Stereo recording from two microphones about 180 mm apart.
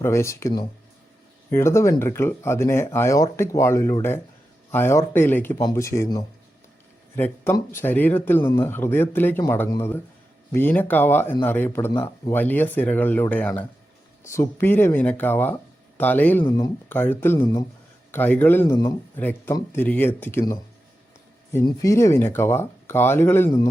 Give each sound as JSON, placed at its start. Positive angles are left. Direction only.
{"t": 0.0, "sound": "speech", "side_deg": 15}